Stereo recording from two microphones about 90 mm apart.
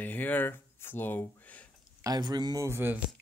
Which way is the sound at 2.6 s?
30° right (ahead or behind).